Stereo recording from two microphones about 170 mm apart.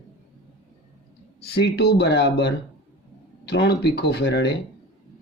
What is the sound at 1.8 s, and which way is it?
Speech, 75° left (ahead or behind).